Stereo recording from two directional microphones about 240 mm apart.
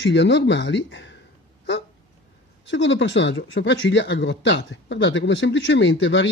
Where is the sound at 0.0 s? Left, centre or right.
Left.